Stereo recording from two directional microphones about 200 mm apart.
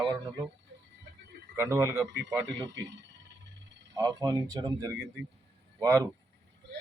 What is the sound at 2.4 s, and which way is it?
Speech, 65° right (ahead or behind).